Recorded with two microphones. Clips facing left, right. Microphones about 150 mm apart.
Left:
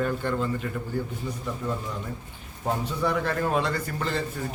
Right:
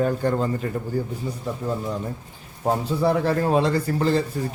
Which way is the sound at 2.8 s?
35° right (ahead or behind).